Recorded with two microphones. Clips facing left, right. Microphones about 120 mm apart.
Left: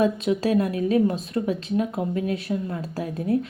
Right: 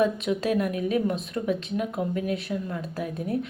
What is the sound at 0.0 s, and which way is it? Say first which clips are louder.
Speech: left 3 dB; 30° left (ahead or behind).